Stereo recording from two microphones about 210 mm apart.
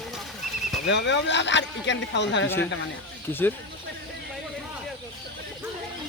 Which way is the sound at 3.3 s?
10° left (ahead or behind).